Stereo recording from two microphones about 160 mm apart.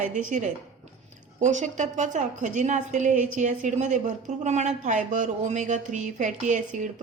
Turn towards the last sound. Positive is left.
turn(degrees=-50)  # may be behind; listen again after turning